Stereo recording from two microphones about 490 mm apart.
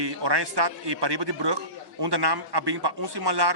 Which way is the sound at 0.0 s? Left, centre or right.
Right.